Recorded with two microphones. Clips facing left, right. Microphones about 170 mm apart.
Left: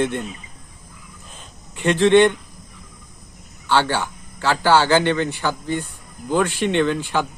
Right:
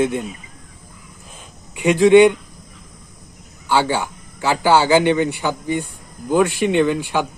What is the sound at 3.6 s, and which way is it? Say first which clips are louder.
Speech: right 1 dB; 10° right (ahead or behind).